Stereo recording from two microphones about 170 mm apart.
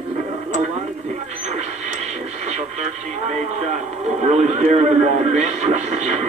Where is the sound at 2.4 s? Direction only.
40° right (ahead or behind).